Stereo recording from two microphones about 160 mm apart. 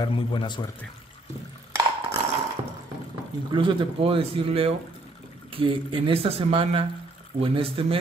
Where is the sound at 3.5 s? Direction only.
30° right (ahead or behind).